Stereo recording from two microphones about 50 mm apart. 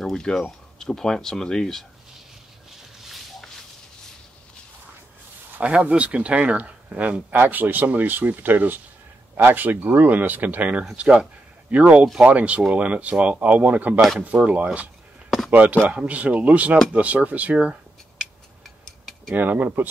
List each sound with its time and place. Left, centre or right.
0.1 s speech: centre
5.6 s speech: right
15.2 s a sound: centre
15.5 s speech: right
18.9 s cutlery: centre
19.3 s speech: right